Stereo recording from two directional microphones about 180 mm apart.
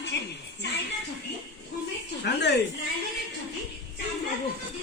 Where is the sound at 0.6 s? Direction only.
70° left (ahead or behind).